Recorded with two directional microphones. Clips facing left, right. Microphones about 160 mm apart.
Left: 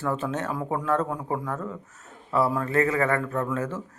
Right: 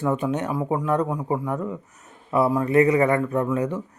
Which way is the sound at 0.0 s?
15° right (ahead or behind).